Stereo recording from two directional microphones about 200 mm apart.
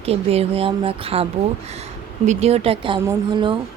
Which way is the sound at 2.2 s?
30° right (ahead or behind).